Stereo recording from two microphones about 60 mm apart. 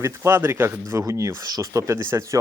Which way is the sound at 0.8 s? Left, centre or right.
Right.